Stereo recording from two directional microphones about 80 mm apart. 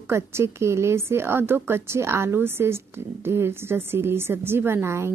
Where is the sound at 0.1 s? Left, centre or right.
Right.